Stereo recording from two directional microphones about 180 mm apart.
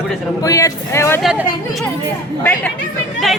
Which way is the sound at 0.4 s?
15° left (ahead or behind).